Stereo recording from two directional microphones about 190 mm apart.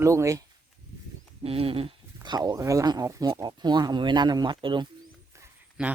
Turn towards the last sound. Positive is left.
turn(degrees=-5)  # may be behind; listen again after turning